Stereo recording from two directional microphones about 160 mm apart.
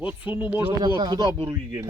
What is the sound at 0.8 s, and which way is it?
Speech, 25° right (ahead or behind).